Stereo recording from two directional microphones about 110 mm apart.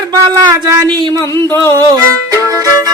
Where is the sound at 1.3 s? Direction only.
20° left (ahead or behind).